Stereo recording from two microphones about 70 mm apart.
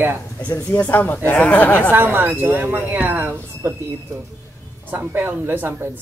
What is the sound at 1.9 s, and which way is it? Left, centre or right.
Speech, right.